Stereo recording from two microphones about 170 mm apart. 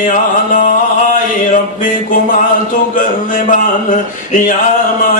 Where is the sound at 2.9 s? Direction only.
50° left (ahead or behind).